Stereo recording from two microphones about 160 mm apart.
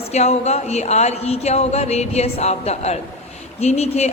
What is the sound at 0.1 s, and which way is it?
A man's voice, 45° left (ahead or behind).